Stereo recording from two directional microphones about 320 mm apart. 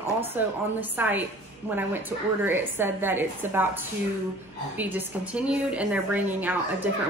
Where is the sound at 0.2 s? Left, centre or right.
Centre.